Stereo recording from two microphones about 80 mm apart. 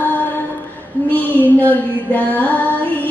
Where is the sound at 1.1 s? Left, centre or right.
Left.